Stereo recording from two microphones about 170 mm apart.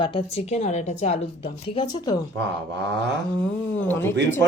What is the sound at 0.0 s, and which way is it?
A woman's voice, 35° left (ahead or behind).